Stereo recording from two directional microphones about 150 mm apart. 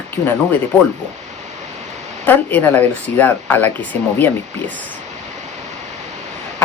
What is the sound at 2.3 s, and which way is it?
Speech, 10° left (ahead or behind).